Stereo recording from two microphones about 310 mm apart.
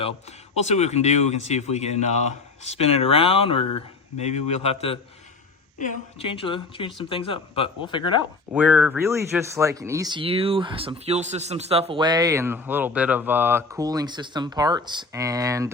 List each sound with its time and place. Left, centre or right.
0.5 s a woman's voice: left
8.5 s speech: centre